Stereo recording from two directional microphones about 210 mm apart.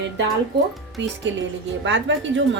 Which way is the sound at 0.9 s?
60° right (ahead or behind).